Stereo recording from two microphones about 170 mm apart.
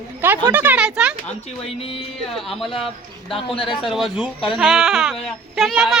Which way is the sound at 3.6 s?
Centre (ahead or behind).